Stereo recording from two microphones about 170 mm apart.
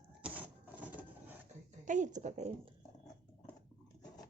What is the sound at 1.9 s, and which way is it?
Speech, 45° right (ahead or behind).